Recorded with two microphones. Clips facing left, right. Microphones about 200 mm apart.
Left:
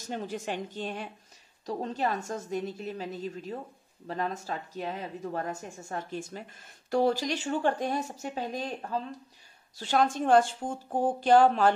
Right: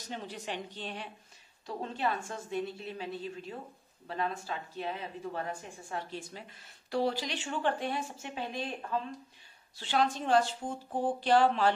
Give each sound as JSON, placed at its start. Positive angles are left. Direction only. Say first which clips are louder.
{"t": 0.0, "sound": "a woman's voice", "louder": "left 6 dB", "side_deg": 45}